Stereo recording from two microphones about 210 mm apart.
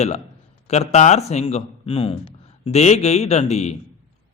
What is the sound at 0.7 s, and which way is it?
A man's voice, 30° left (ahead or behind).